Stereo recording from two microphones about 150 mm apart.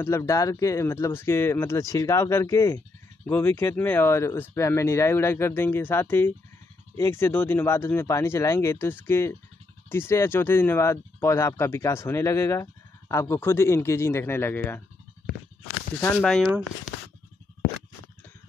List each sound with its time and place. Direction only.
0.0 s speech: 20° left (ahead or behind)
16.2 s speech: 5° left (ahead or behind)